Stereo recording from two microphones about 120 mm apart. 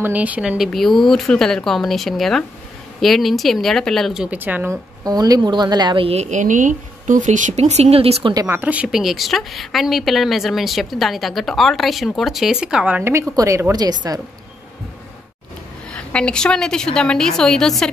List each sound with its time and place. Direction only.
0.0 s speech: 10° right (ahead or behind)
0.7 s a woman's voice: centre (ahead or behind); by 4.7 s 15° right (ahead or behind)
5.0 s a woman's voice: 30° right (ahead or behind)
6.0 s a woman's voice: 70° right (ahead or behind)
8.5 s a woman's voice: 15° right (ahead or behind)
13.4 s a woman's voice: 25° right (ahead or behind)
15.9 s a woman's voice: 10° left (ahead or behind)